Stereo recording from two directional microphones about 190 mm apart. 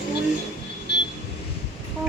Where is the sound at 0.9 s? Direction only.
65° left (ahead or behind).